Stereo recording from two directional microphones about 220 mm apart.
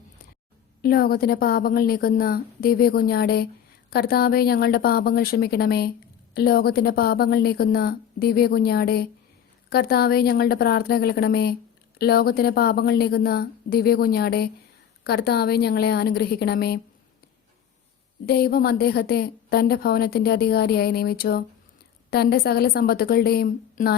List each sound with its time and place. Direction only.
0.8 s a woman's voice: 45° left (ahead or behind)
18.3 s a woman's voice: 45° left (ahead or behind)